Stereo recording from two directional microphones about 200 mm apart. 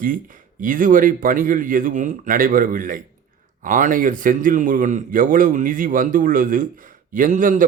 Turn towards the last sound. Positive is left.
turn(degrees=-40)  # may be behind; listen again after turning